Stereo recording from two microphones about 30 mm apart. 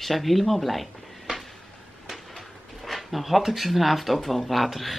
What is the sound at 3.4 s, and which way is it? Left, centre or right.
Speech, centre.